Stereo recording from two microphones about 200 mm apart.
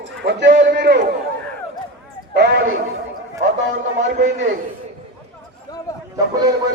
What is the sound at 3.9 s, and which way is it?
Speech, 65° right (ahead or behind).